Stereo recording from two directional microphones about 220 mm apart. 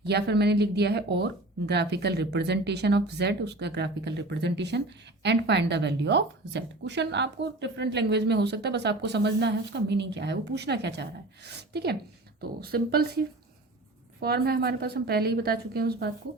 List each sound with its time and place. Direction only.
0.0 s speech: 50° right (ahead or behind)
14.2 s speech: 45° right (ahead or behind)